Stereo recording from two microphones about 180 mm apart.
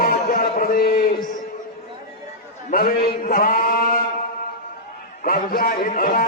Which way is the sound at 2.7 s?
55° left (ahead or behind).